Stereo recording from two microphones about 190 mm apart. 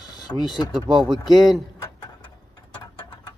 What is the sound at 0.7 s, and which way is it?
Speech, centre (ahead or behind).